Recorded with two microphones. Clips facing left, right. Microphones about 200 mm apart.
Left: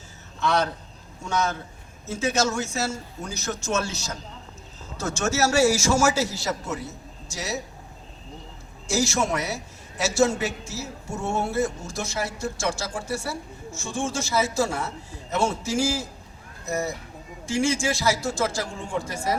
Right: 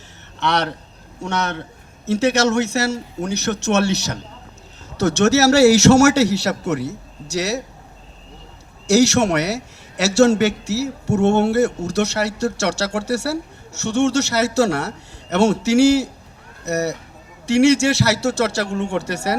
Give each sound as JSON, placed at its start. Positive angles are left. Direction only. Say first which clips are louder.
{"t": 0.3, "sound": "a man's voice", "louder": "right 3 dB", "side_deg": -70}
{"t": 8.9, "sound": "a man's voice", "louder": "right 9 dB", "side_deg": -70}